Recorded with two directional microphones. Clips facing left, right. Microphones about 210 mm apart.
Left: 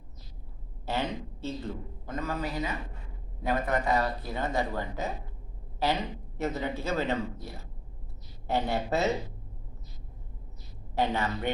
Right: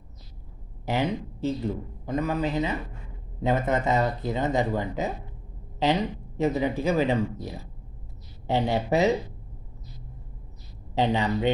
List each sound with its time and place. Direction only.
0.8 s a man's voice: 15° right (ahead or behind)
11.0 s speech: 15° right (ahead or behind)